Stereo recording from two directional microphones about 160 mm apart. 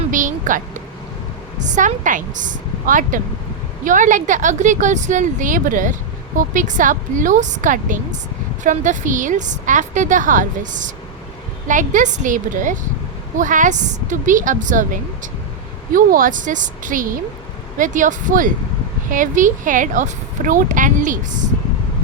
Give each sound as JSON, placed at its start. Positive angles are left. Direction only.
{"t": 0.1, "sound": "a woman's voice", "side_deg": -55}